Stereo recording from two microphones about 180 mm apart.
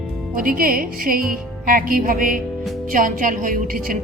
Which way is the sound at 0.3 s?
50° right (ahead or behind).